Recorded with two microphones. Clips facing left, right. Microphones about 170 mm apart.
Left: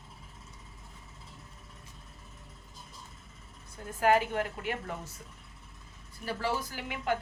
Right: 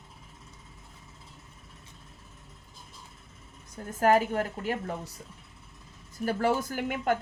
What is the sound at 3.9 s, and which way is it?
A woman's voice, 40° right (ahead or behind).